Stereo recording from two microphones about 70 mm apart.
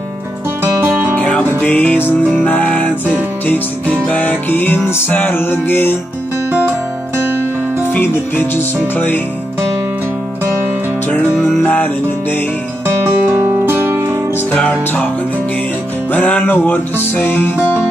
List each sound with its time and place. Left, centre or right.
0.7 s music: right
1.1 s music: centre
7.9 s music: left
11.1 s music: left
12.8 s music: right
14.5 s music: left
16.1 s music: left